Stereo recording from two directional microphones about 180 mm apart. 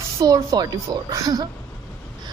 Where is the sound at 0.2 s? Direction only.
20° right (ahead or behind).